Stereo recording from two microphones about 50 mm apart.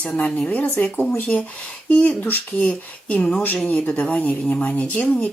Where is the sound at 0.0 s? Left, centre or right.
Left.